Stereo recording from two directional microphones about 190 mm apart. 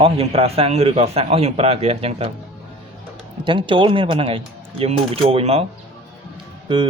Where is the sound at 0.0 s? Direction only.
30° right (ahead or behind).